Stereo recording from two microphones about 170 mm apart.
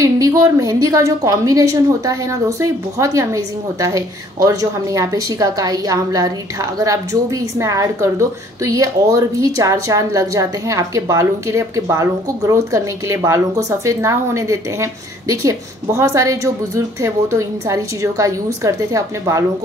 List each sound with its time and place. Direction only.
0.0 s a woman's voice: 20° right (ahead or behind)